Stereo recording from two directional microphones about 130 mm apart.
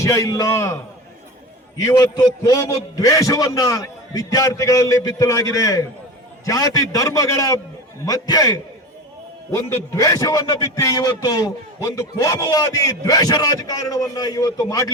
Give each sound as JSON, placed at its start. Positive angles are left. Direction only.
{"t": 0.0, "sound": "a man's voice", "side_deg": 25}
{"t": 1.9, "sound": "a man's voice", "side_deg": 30}